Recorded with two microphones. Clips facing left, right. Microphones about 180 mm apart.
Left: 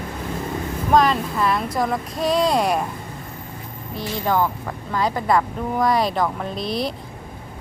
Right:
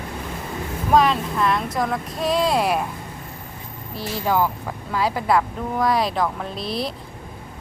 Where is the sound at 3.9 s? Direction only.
5° right (ahead or behind).